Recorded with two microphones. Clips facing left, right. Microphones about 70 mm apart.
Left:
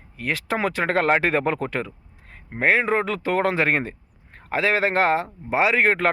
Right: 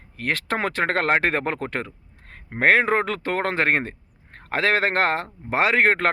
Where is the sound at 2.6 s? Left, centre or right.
Right.